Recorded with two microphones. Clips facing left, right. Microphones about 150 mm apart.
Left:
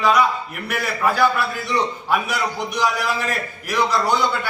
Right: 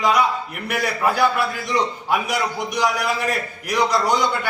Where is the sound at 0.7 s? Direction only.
15° right (ahead or behind).